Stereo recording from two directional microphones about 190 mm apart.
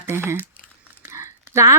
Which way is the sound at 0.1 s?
10° right (ahead or behind).